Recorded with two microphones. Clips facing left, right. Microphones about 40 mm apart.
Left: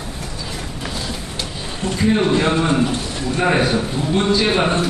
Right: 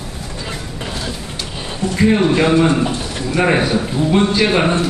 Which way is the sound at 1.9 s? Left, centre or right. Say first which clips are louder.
Right 3 dB; right.